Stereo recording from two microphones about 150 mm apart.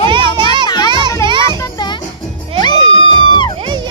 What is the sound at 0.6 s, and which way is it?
Children playing, 25° left (ahead or behind).